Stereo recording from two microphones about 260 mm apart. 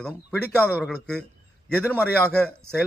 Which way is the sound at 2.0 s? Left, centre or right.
Centre.